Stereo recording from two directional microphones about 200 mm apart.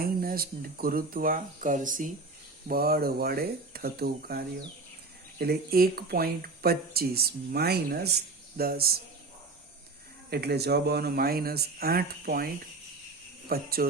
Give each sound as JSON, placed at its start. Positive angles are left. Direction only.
{"t": 0.0, "sound": "speech", "side_deg": -45}
{"t": 10.2, "sound": "speech", "side_deg": -50}
{"t": 13.5, "sound": "speech", "side_deg": -50}